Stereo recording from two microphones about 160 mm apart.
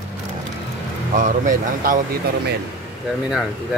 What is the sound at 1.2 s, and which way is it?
Speech, 55° right (ahead or behind).